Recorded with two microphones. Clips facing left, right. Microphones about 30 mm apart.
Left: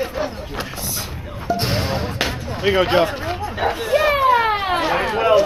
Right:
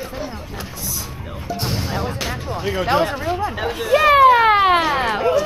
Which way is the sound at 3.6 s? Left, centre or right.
Centre.